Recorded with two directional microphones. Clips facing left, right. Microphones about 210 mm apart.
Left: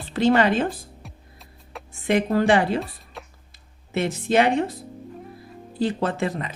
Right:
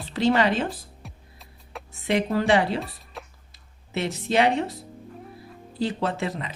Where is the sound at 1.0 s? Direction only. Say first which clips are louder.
Left 1 dB; centre (ahead or behind).